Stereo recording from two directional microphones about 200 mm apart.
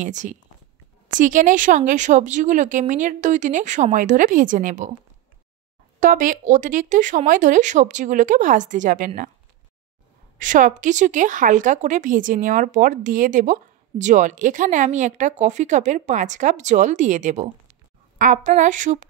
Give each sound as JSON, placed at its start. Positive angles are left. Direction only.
{"t": 0.0, "sound": "a woman's voice", "side_deg": -40}
{"t": 5.9, "sound": "a woman's voice", "side_deg": -40}
{"t": 10.4, "sound": "a woman's voice", "side_deg": -40}